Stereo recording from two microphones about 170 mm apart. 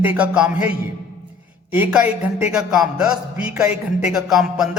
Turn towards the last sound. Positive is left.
turn(degrees=0)  # may be behind; listen again after turning